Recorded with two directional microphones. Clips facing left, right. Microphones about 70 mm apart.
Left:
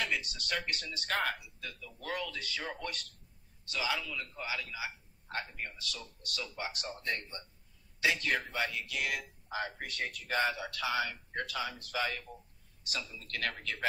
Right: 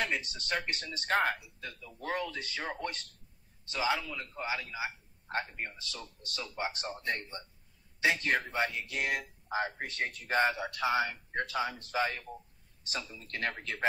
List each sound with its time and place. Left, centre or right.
0.0 s speech: right